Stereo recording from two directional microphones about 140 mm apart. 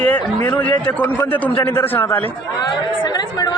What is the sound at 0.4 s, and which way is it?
A man's voice, 10° left (ahead or behind).